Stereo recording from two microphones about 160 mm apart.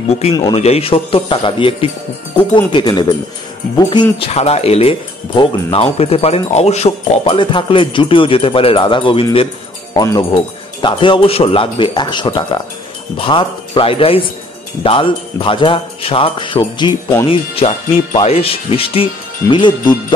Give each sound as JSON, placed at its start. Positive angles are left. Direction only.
{"t": 0.6, "sound": "speech", "side_deg": 40}
{"t": 4.3, "sound": "speech", "side_deg": 40}
{"t": 9.9, "sound": "speech", "side_deg": 25}